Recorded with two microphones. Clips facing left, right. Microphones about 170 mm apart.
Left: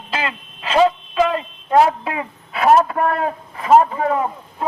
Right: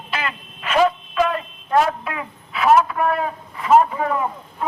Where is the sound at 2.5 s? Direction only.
40° left (ahead or behind).